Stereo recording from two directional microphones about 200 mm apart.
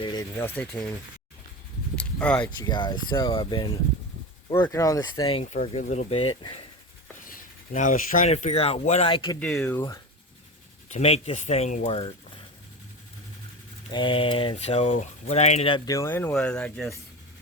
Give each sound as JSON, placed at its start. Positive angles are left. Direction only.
{"t": 0.0, "sound": "speech", "side_deg": 20}
{"t": 2.0, "sound": "a sound", "side_deg": 5}
{"t": 2.6, "sound": "speech", "side_deg": 20}
{"t": 7.3, "sound": "speech", "side_deg": 40}
{"t": 9.4, "sound": "speech", "side_deg": 5}
{"t": 10.9, "sound": "speech", "side_deg": 35}
{"t": 13.9, "sound": "speech", "side_deg": 25}